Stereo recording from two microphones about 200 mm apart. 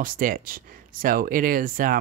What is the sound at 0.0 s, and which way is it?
Speech, 45° right (ahead or behind).